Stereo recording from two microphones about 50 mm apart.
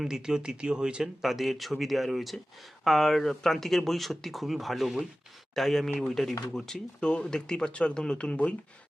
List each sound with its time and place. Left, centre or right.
0.0 s speech: centre
1.2 s speech: centre
7.0 s speech: centre